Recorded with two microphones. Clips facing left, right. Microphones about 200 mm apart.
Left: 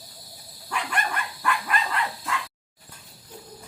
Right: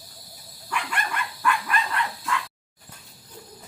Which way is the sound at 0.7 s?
45° left (ahead or behind).